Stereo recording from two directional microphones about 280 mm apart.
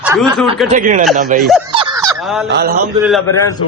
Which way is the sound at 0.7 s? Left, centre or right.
Right.